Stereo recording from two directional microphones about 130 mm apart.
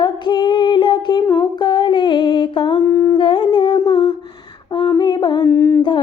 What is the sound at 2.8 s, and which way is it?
Humming, 20° left (ahead or behind).